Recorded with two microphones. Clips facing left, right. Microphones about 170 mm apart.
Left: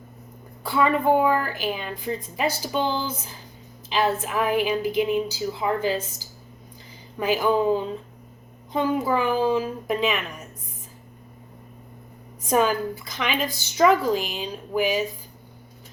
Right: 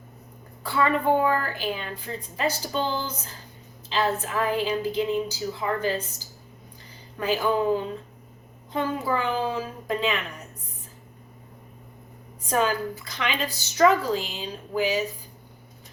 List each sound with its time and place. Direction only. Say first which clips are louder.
0.6 s a woman's voice: left 2 dB; 15° left (ahead or behind)
12.5 s a woman's voice: left 3 dB; 15° left (ahead or behind)